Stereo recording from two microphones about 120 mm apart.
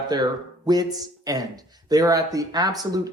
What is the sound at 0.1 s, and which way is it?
Speech, 35° right (ahead or behind).